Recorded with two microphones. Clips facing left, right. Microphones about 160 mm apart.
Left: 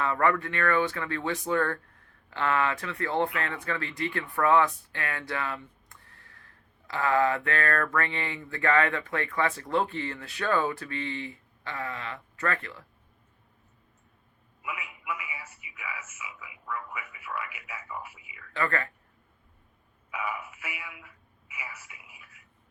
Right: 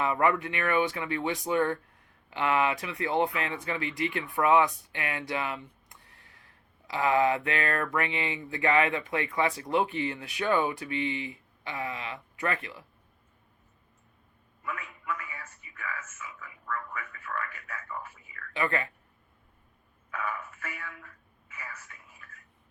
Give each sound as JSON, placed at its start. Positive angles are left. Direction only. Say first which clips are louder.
{"t": 0.0, "sound": "speech", "louder": "even", "side_deg": -15}
{"t": 14.6, "sound": "telephone", "louder": "even", "side_deg": 10}
{"t": 18.5, "sound": "speech", "louder": "even", "side_deg": -20}
{"t": 20.1, "sound": "telephone", "louder": "left 1 dB", "side_deg": 10}